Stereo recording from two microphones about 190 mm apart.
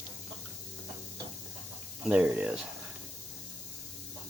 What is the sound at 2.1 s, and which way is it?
Speech, 5° right (ahead or behind).